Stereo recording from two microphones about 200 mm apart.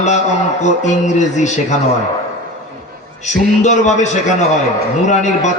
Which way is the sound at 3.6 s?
35° left (ahead or behind).